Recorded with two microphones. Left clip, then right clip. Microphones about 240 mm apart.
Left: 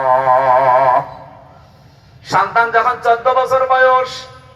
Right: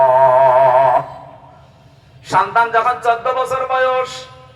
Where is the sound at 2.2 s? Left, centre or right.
Right.